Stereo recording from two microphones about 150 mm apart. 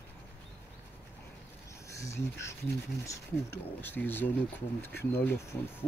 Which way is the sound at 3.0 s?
15° left (ahead or behind).